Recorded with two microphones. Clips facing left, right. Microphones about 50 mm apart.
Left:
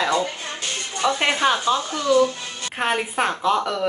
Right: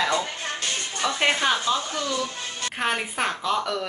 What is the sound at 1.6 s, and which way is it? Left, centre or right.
Speech, left.